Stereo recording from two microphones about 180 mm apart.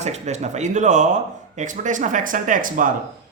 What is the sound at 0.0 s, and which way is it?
A man's voice, 40° right (ahead or behind).